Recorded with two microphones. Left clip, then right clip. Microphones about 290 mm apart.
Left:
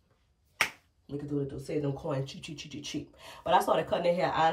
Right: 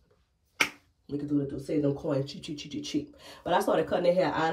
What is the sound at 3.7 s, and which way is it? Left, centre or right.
Speech, centre.